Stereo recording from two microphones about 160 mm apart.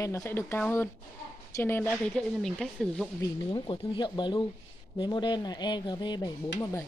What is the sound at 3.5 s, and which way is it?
Speech, 30° left (ahead or behind).